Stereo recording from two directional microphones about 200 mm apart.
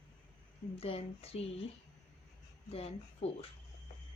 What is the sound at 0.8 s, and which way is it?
Speech, 30° left (ahead or behind).